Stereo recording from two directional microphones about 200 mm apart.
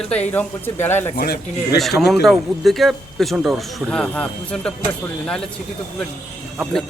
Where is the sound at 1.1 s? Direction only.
50° left (ahead or behind).